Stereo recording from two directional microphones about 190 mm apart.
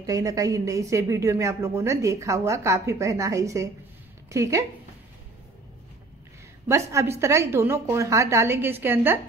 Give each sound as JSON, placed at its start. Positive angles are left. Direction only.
{"t": 0.0, "sound": "speech", "side_deg": -20}
{"t": 6.7, "sound": "speech", "side_deg": -15}